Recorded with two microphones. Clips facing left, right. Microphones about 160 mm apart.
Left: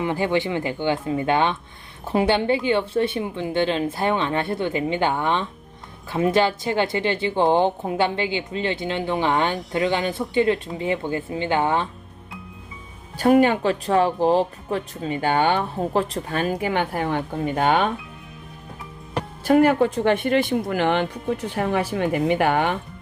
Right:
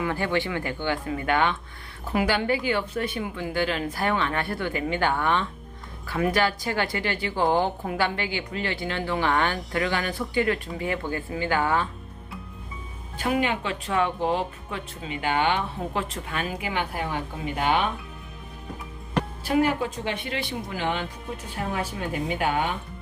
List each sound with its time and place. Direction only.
0.0 s a woman's voice: 20° left (ahead or behind)
13.1 s speech: 40° left (ahead or behind)
19.5 s speech: 50° left (ahead or behind)